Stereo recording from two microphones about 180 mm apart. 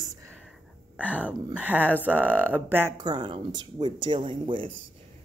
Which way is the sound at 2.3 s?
10° left (ahead or behind).